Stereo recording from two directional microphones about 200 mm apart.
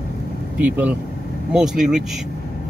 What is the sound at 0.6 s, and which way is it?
Speech, 10° right (ahead or behind).